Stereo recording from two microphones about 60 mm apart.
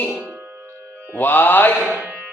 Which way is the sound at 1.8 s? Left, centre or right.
Right.